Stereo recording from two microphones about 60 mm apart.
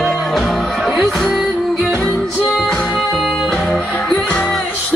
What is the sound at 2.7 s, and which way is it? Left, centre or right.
Music, centre.